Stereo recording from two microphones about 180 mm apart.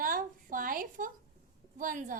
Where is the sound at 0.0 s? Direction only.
50° right (ahead or behind).